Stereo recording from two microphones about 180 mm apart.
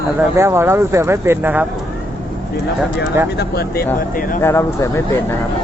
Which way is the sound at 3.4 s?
60° left (ahead or behind).